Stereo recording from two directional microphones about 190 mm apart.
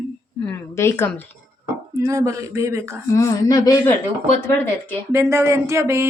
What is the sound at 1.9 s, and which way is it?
Speech, 15° right (ahead or behind).